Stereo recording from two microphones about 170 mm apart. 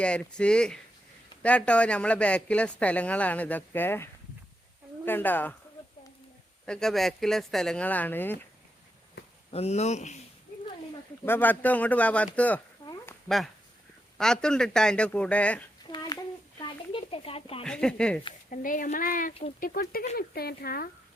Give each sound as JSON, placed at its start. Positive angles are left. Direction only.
{"t": 0.0, "sound": "speech", "side_deg": 5}
{"t": 6.7, "sound": "speech", "side_deg": 5}
{"t": 9.5, "sound": "speech", "side_deg": 40}
{"t": 11.3, "sound": "speech", "side_deg": 10}
{"t": 16.6, "sound": "a sound", "side_deg": 30}
{"t": 17.6, "sound": "speech", "side_deg": 5}
{"t": 18.5, "sound": "speech", "side_deg": 50}